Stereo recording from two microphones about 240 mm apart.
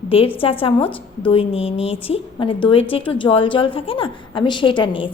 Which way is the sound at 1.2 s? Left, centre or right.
Left.